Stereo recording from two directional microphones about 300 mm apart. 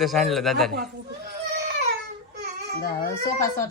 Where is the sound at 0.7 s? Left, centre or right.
Right.